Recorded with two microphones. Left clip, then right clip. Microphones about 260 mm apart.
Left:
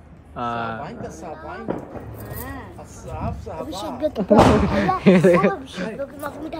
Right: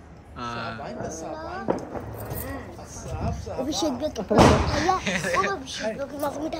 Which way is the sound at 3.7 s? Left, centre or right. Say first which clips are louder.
Right 6 dB; right.